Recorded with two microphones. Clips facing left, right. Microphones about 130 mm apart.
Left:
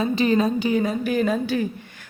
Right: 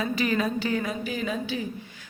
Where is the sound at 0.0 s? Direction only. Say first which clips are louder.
Left 6 dB; 25° left (ahead or behind).